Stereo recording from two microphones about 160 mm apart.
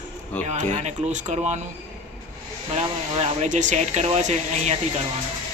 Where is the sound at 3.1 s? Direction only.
40° right (ahead or behind).